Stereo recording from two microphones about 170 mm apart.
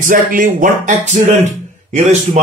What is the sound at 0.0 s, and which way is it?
Speech, 50° right (ahead or behind).